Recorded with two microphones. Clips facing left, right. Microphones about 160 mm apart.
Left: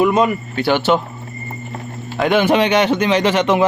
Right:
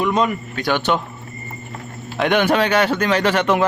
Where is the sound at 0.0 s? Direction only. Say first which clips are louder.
Left 4 dB; 5° left (ahead or behind).